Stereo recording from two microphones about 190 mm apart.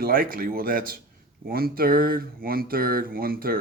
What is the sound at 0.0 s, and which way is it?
Speech, 50° right (ahead or behind).